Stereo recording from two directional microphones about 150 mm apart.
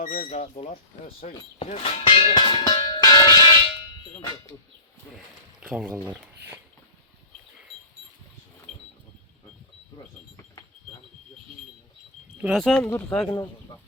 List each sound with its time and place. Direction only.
0.3 s speech: 45° left (ahead or behind)
2.9 s music: 25° left (ahead or behind)
5.1 s speech: 5° right (ahead or behind)
12.4 s speech: centre (ahead or behind)